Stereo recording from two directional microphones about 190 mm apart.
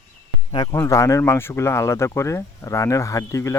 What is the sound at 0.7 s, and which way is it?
Speech, 15° left (ahead or behind).